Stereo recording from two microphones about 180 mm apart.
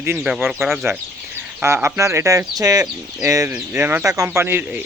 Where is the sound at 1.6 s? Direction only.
15° right (ahead or behind).